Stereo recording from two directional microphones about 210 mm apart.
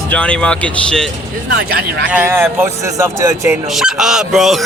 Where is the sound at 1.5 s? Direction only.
50° right (ahead or behind).